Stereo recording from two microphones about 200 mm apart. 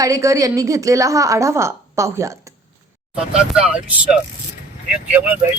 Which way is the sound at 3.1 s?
5° right (ahead or behind).